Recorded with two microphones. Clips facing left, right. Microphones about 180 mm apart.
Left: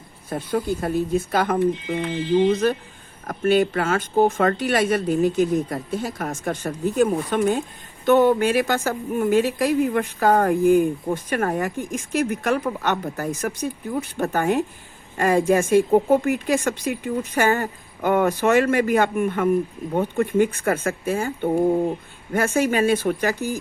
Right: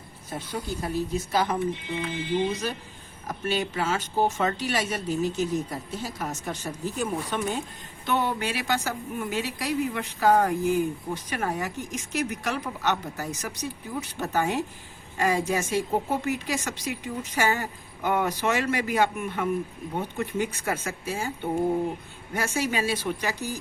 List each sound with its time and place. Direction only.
0.3 s speech: 55° left (ahead or behind)